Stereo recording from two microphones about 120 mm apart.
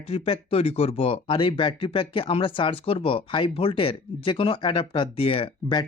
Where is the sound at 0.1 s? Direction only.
55° left (ahead or behind).